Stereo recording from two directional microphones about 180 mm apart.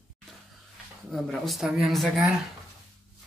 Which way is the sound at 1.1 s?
Centre (ahead or behind).